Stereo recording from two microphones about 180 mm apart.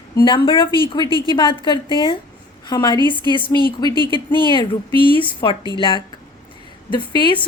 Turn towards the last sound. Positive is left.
turn(degrees=25)  # may be behind; listen again after turning